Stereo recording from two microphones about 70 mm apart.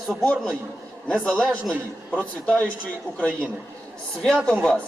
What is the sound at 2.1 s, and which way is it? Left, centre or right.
A man's voice, left.